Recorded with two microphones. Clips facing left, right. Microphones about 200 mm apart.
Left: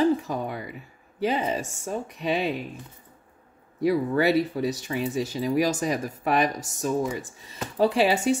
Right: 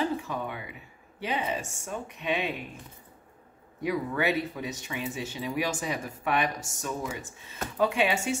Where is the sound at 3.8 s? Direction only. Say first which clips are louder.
Left 6 dB; 35° left (ahead or behind).